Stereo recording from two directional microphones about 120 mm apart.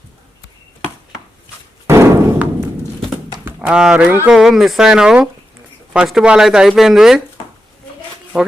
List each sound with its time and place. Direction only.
1.9 s thump: 20° right (ahead or behind)
3.4 s speech: 5° right (ahead or behind)